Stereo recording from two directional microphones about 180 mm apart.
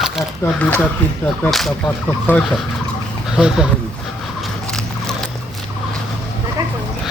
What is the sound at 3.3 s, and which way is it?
Speech, 5° right (ahead or behind).